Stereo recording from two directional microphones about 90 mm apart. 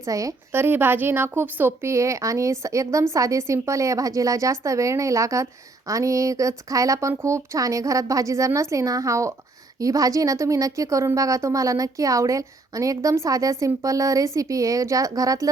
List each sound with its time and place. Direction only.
0.0 s a woman's voice: 40° right (ahead or behind)
0.5 s a woman's voice: 25° right (ahead or behind)
1.9 s a woman's voice: 35° right (ahead or behind)